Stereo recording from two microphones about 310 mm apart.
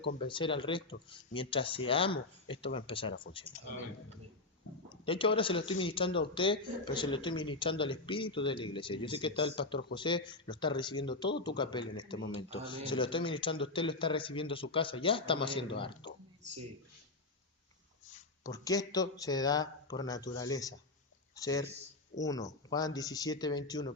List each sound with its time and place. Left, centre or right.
0.3 s a man's voice: centre
4.9 s a man's voice: centre
16.4 s speech: right
18.4 s a man's voice: centre